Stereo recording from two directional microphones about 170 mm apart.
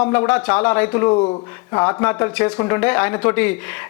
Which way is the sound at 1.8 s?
10° left (ahead or behind).